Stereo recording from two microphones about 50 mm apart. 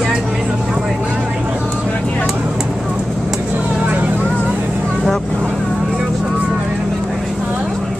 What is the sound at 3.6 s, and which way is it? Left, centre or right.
Vehicle, right.